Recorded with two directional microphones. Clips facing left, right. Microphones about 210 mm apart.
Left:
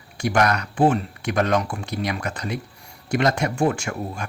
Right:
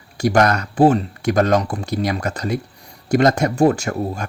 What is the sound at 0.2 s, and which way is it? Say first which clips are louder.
Speech: right 5 dB; 40° right (ahead or behind).